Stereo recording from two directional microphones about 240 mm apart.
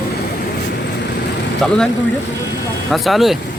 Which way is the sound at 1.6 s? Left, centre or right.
Centre.